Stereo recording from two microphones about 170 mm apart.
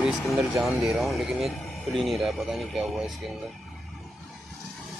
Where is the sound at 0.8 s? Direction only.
Centre (ahead or behind).